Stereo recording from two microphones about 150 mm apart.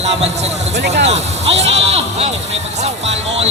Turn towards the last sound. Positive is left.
turn(degrees=-45)  # may be behind; listen again after turning